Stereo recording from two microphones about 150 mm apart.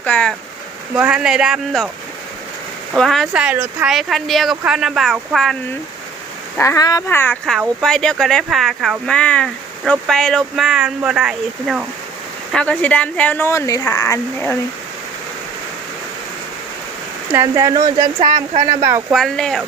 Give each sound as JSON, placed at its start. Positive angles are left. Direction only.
{"t": 0.0, "sound": "speech", "side_deg": 10}
{"t": 0.9, "sound": "speech", "side_deg": -5}
{"t": 2.9, "sound": "speech", "side_deg": 0}
{"t": 3.8, "sound": "speech", "side_deg": 0}
{"t": 6.6, "sound": "speech", "side_deg": 20}
{"t": 7.8, "sound": "speech", "side_deg": 5}
{"t": 12.5, "sound": "speech", "side_deg": 5}
{"t": 17.3, "sound": "speech", "side_deg": -20}
{"t": 19.1, "sound": "speech", "side_deg": 0}